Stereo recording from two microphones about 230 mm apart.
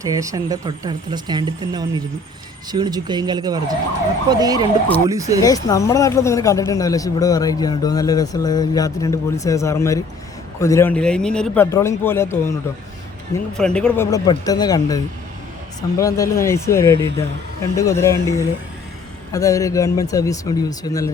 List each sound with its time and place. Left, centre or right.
0.0 s speech: centre
5.4 s speech: centre
13.6 s speech: centre